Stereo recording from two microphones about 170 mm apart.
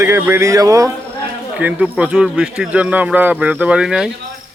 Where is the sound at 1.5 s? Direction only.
5° right (ahead or behind).